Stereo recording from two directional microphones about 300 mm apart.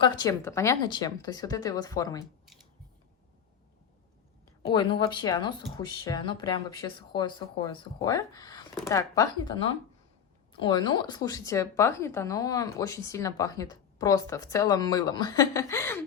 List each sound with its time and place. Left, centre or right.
0.0 s speech: centre
4.7 s speech: centre